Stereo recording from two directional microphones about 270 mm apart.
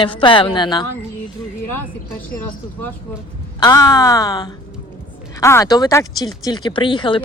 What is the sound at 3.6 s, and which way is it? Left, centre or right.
Speech, centre.